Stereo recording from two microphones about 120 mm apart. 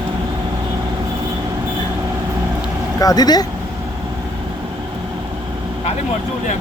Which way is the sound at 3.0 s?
30° left (ahead or behind).